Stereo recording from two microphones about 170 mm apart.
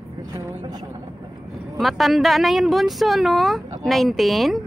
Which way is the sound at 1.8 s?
Centre (ahead or behind).